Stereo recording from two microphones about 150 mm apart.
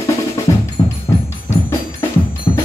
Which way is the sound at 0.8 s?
25° left (ahead or behind).